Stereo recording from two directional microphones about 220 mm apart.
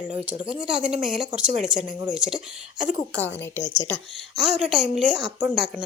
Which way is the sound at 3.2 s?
10° left (ahead or behind).